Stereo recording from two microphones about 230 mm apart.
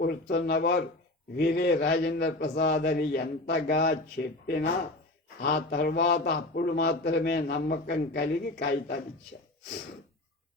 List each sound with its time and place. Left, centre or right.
0.0 s a man's voice: left